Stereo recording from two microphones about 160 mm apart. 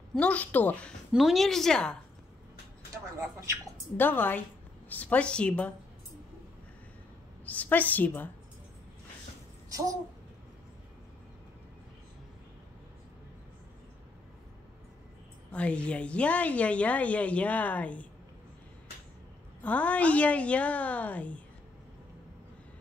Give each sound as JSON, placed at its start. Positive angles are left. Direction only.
{"t": 0.1, "sound": "a woman's voice", "side_deg": 10}
{"t": 1.1, "sound": "a woman's voice", "side_deg": 0}
{"t": 3.7, "sound": "a woman's voice", "side_deg": 10}
{"t": 7.4, "sound": "a woman's voice", "side_deg": 10}
{"t": 9.7, "sound": "babbling", "side_deg": -20}
{"t": 15.5, "sound": "a woman's voice", "side_deg": 10}
{"t": 19.6, "sound": "a woman's voice", "side_deg": 10}